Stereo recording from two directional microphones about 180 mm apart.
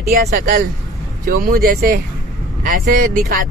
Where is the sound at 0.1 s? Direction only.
55° right (ahead or behind).